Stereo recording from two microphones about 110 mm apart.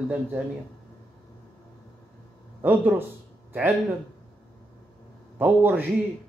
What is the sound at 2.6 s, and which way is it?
Speech, 15° right (ahead or behind).